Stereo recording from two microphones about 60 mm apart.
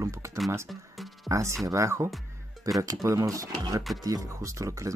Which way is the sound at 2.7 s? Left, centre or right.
Right.